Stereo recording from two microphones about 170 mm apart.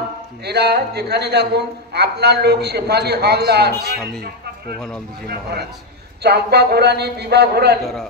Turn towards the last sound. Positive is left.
turn(degrees=-70)  # may be behind; listen again after turning